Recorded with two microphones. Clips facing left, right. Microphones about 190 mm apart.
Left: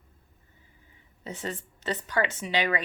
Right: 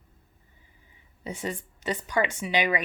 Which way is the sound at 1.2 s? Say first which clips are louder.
Right 2 dB; 10° right (ahead or behind).